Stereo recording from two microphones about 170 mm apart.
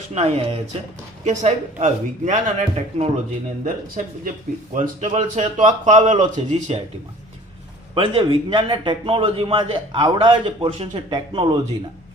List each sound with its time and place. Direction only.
0.1 s a man's voice: 40° right (ahead or behind)
3.6 s a man's voice: 55° right (ahead or behind)
7.9 s a man's voice: 30° right (ahead or behind)